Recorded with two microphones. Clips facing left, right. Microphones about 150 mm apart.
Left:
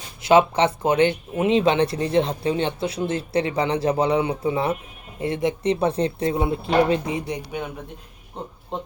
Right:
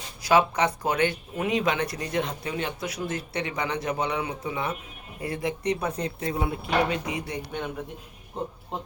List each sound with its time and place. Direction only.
0.2 s speech: 25° left (ahead or behind)
8.4 s speech: 5° right (ahead or behind)